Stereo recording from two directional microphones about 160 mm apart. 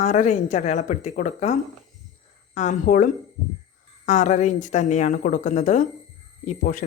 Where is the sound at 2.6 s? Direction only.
55° left (ahead or behind).